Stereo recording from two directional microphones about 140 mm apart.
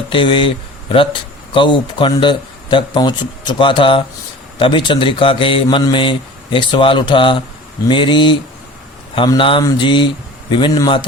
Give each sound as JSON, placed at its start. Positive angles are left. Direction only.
{"t": 0.1, "sound": "a man's voice", "side_deg": 40}